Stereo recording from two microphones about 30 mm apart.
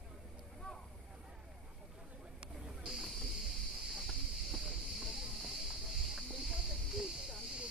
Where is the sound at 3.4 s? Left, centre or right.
Centre.